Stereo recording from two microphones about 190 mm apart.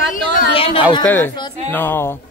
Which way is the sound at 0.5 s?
30° left (ahead or behind).